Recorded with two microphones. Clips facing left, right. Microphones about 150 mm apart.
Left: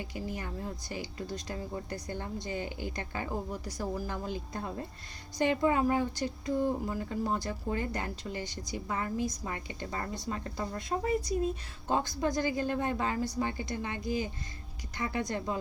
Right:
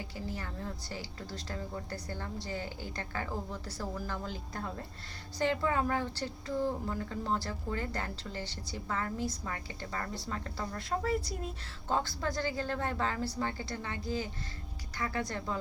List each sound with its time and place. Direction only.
0.3 s a woman's voice: 15° left (ahead or behind)